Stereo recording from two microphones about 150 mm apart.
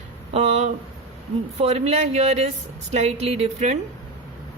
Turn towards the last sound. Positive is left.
turn(degrees=-50)  # may be behind; listen again after turning